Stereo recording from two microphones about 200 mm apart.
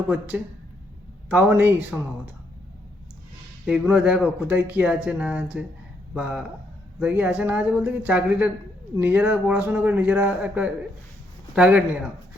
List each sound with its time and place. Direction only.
0.1 s a man's voice: 5° right (ahead or behind)
3.7 s a man's voice: 5° right (ahead or behind)